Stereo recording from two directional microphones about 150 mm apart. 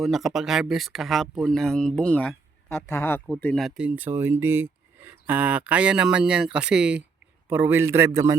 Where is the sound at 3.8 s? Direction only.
10° right (ahead or behind).